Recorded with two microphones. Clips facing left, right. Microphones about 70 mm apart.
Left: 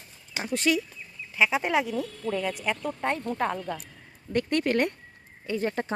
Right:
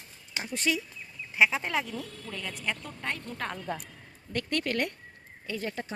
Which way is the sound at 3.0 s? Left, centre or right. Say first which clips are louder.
Left 7 dB; left.